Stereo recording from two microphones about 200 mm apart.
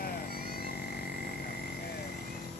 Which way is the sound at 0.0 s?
50° left (ahead or behind).